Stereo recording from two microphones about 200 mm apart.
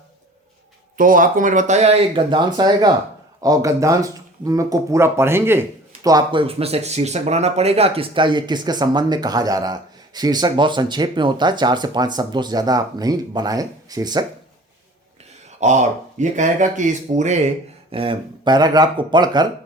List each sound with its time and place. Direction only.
0.9 s speech: 45° right (ahead or behind); by 14.3 s 20° right (ahead or behind)
15.6 s speech: 35° right (ahead or behind); by 19.5 s 20° right (ahead or behind)